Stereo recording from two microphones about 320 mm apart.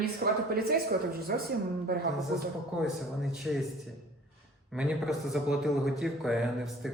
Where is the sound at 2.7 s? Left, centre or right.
Centre.